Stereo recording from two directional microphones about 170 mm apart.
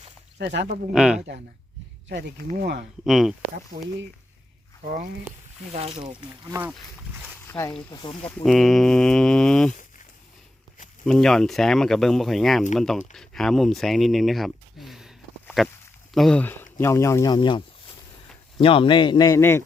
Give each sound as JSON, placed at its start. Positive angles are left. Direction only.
{"t": 0.3, "sound": "speech", "side_deg": -85}
{"t": 0.9, "sound": "speech", "side_deg": -5}
{"t": 2.6, "sound": "speech", "side_deg": -75}
{"t": 3.0, "sound": "speech", "side_deg": 0}
{"t": 5.7, "sound": "speech", "side_deg": -35}
{"t": 6.5, "sound": "speech", "side_deg": -10}
{"t": 7.2, "sound": "a sound", "side_deg": 15}
{"t": 8.0, "sound": "speech", "side_deg": 30}
{"t": 8.4, "sound": "speech", "side_deg": 0}
{"t": 11.0, "sound": "speech", "side_deg": 0}
{"t": 15.4, "sound": "a sound", "side_deg": 0}
{"t": 16.1, "sound": "speech", "side_deg": 5}
{"t": 18.6, "sound": "a man's voice", "side_deg": 30}